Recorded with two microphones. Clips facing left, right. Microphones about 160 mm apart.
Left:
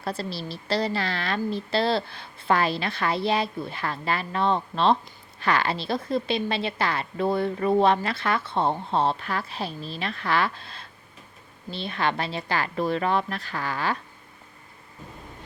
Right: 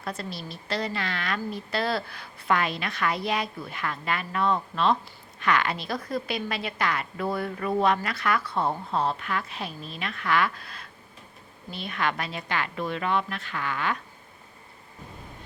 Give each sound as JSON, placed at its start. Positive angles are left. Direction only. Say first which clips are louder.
{"t": 0.0, "sound": "a woman's voice", "louder": "left 4 dB", "side_deg": 30}